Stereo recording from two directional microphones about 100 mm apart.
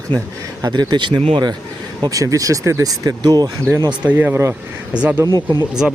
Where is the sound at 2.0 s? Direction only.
35° right (ahead or behind).